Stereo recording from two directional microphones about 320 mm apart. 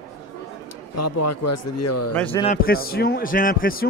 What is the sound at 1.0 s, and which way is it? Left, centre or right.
Speech, left.